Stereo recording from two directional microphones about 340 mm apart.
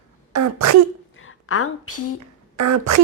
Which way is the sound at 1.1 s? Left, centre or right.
Left.